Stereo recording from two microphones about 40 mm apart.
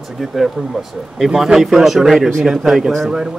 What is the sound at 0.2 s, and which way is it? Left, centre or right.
Speech, centre.